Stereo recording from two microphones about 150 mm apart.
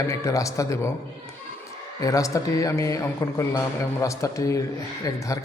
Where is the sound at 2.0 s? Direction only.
20° left (ahead or behind).